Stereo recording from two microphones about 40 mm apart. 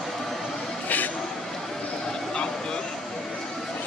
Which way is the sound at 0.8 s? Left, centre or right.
Left.